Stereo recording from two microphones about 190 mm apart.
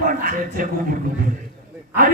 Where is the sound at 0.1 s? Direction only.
45° right (ahead or behind).